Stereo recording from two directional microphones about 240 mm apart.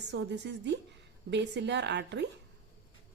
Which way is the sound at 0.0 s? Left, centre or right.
Right.